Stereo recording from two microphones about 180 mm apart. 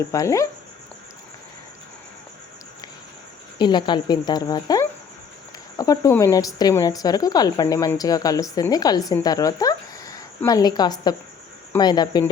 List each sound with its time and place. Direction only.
0.1 s speech: 15° left (ahead or behind)
3.6 s speech: 25° left (ahead or behind)